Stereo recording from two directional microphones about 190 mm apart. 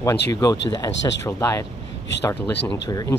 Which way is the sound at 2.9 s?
20° left (ahead or behind).